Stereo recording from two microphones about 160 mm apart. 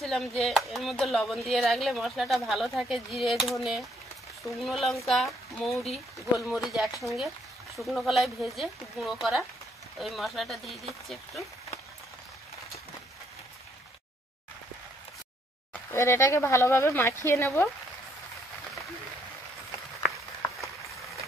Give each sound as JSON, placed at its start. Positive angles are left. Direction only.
{"t": 0.0, "sound": "speech", "side_deg": 0}
{"t": 15.9, "sound": "speech", "side_deg": 15}